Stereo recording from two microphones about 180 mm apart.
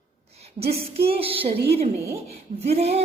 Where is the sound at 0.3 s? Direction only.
35° right (ahead or behind).